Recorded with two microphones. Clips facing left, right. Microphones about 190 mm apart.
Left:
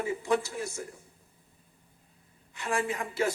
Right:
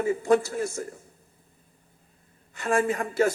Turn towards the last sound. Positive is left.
turn(degrees=-45)  # may be behind; listen again after turning